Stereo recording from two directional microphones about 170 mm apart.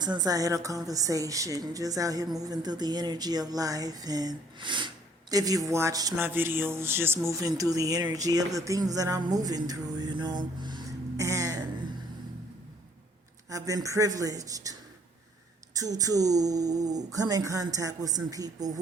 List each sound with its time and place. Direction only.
0.0 s a man's voice: 25° right (ahead or behind)
13.5 s speech: 20° right (ahead or behind)